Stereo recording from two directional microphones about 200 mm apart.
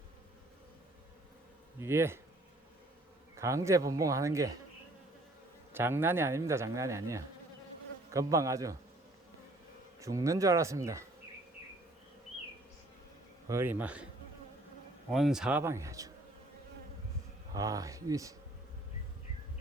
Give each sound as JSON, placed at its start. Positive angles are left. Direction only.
{"t": 1.8, "sound": "speech", "side_deg": -10}
{"t": 3.3, "sound": "speech", "side_deg": -15}
{"t": 5.7, "sound": "speech", "side_deg": -10}
{"t": 10.0, "sound": "speech", "side_deg": -15}
{"t": 13.5, "sound": "speech", "side_deg": -10}
{"t": 15.1, "sound": "speech", "side_deg": 0}
{"t": 17.5, "sound": "speech", "side_deg": -15}